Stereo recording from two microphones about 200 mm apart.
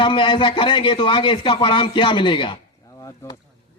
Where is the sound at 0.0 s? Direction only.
25° left (ahead or behind).